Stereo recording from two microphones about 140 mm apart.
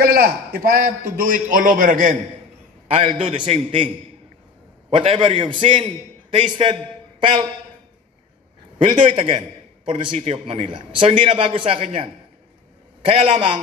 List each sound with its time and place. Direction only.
0.0 s a man's voice: 90° right; by 2.1 s 70° right (ahead or behind)
2.9 s a man's voice: 45° right (ahead or behind)
9.1 s a man's voice: 50° right (ahead or behind)